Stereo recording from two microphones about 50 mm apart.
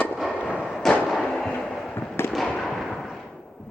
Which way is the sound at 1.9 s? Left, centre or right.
Left.